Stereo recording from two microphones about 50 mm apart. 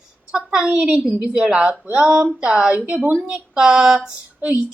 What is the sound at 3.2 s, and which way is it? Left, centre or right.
Speech, centre.